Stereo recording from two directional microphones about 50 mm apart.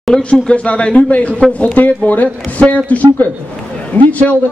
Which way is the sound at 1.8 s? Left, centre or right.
Left.